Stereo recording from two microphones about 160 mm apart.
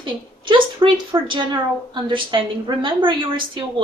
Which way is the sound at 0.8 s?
30° right (ahead or behind).